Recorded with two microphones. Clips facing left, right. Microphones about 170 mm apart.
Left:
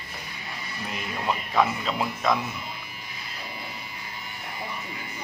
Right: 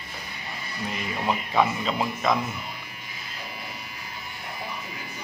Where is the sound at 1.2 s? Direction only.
Centre (ahead or behind).